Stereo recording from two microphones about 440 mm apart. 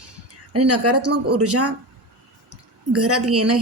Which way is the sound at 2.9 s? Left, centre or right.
Right.